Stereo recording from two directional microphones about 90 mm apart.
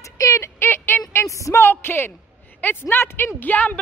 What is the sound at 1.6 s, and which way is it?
A woman's voice, 25° left (ahead or behind).